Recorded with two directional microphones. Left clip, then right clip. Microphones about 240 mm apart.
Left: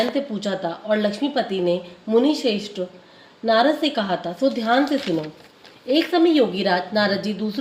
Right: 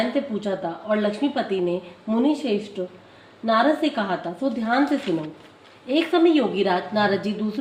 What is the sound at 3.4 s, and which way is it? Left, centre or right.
A woman's voice, left.